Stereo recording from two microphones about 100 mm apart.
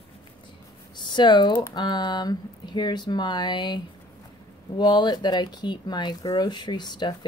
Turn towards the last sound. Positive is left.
turn(degrees=45)  # may be behind; listen again after turning